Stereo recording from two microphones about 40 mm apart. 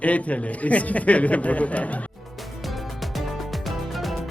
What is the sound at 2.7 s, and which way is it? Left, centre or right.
Music, centre.